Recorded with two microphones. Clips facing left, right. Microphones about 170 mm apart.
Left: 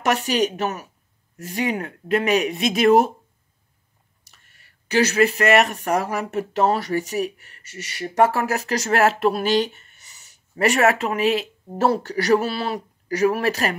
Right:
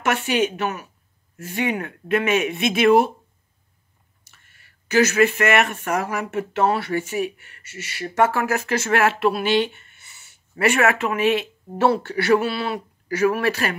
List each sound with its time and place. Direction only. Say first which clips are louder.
0.0 s speech: left 1 dB; 40° left (ahead or behind)
4.2 s speech: right 1 dB; 35° left (ahead or behind)